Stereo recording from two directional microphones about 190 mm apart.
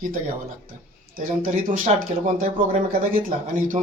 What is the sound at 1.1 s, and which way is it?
A man's voice, 45° right (ahead or behind).